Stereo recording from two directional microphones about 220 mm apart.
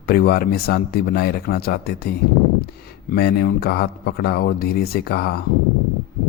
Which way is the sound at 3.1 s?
45° left (ahead or behind).